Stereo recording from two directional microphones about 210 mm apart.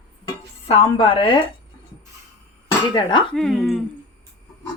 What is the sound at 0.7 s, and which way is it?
Speech, 25° left (ahead or behind).